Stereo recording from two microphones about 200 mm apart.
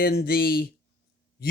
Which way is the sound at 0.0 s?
50° left (ahead or behind).